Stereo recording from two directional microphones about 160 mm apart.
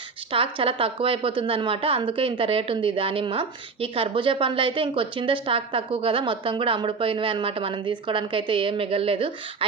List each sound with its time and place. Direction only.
0.3 s a woman's voice: 35° right (ahead or behind)